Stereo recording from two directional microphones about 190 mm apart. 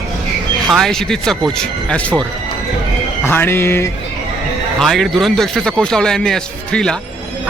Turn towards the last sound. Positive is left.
turn(degrees=5)  # may be behind; listen again after turning